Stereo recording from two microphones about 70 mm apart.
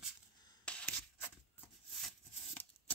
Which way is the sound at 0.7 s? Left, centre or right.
Centre.